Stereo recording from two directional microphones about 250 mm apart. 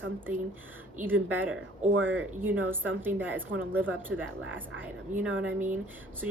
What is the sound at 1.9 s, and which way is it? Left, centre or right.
Speech, right.